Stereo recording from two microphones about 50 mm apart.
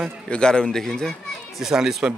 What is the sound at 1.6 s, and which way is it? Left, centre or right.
Speech, centre.